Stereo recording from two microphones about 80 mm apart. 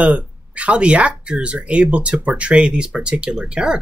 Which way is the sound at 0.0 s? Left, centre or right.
Centre.